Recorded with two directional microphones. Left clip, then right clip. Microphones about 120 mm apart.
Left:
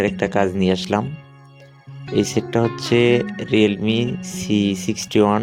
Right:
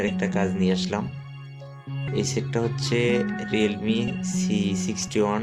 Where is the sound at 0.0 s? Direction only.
90° left.